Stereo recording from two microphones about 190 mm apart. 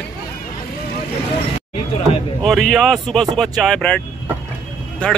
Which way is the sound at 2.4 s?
Centre (ahead or behind).